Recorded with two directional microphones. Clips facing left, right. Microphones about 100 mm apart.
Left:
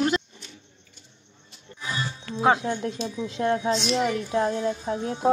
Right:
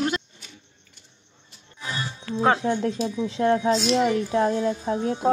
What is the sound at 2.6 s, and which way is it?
A woman's voice, 30° right (ahead or behind).